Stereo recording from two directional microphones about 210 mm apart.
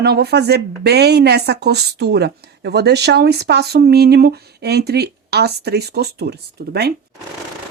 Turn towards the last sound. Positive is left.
turn(degrees=-50)  # may be behind; listen again after turning